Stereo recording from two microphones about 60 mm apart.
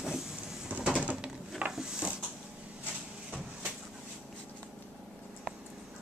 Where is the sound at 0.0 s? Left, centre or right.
Centre.